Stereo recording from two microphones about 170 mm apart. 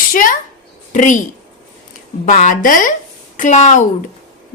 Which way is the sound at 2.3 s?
50° left (ahead or behind).